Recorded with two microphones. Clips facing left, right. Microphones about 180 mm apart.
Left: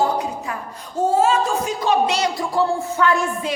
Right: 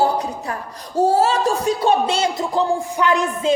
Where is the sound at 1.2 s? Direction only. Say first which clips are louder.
Even; 35° right (ahead or behind).